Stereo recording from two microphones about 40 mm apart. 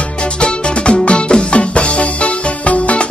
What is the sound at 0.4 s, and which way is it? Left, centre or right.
Music, left.